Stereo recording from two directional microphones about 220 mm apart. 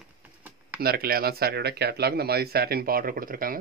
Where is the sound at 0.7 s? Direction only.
45° right (ahead or behind).